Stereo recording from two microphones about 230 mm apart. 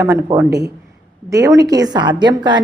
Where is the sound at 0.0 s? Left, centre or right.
Centre.